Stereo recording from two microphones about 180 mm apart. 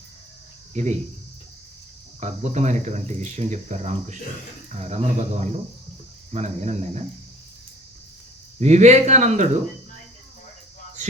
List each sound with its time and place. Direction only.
0.7 s speech: 40° right (ahead or behind)
2.2 s speech: 40° right (ahead or behind)
8.6 s speech: 40° right (ahead or behind)